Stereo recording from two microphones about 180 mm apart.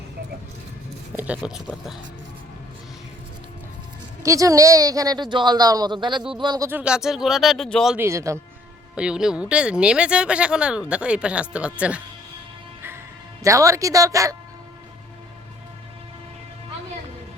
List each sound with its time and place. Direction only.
1.1 s a woman's voice: 10° right (ahead or behind)
4.2 s speech: 20° right (ahead or behind)
6.7 s speech: 5° right (ahead or behind)
7.9 s a woman's voice: 15° right (ahead or behind)
9.0 s speech: 5° right (ahead or behind)
13.4 s a woman's voice: 15° right (ahead or behind)